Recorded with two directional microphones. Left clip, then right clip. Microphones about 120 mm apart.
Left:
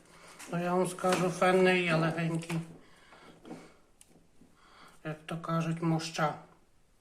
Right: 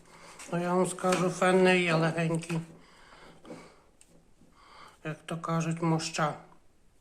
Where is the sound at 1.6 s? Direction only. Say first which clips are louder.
Right 2 dB; 40° right (ahead or behind).